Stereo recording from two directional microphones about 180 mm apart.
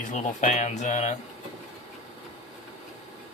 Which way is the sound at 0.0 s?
40° left (ahead or behind).